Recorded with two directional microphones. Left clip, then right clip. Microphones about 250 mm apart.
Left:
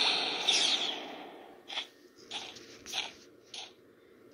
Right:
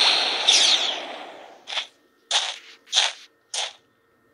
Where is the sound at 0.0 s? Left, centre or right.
Right.